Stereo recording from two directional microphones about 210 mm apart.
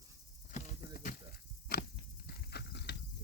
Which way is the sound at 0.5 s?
40° left (ahead or behind).